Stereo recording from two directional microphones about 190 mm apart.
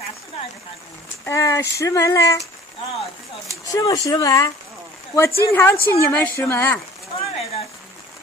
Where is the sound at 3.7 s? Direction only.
20° left (ahead or behind).